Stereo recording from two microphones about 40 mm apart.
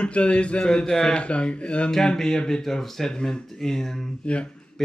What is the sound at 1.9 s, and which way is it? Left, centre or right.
Speech, centre.